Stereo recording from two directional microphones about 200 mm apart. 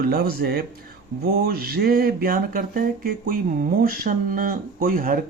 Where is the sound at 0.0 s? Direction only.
50° right (ahead or behind).